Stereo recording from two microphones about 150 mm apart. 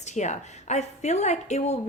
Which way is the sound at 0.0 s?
50° left (ahead or behind).